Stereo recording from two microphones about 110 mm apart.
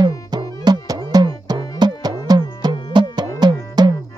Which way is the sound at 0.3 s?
40° right (ahead or behind).